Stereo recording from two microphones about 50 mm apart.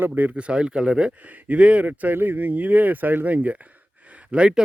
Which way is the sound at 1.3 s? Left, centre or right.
Right.